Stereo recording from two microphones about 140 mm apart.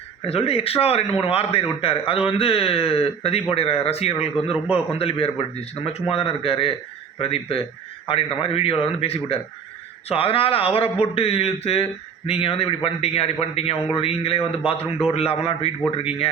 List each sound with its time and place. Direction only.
0.3 s speech: 45° left (ahead or behind)